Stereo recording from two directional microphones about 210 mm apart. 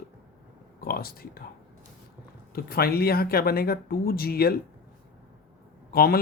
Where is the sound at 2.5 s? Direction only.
45° left (ahead or behind).